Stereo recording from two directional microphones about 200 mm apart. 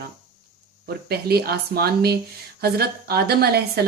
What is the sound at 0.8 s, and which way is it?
A woman's voice, 50° right (ahead or behind).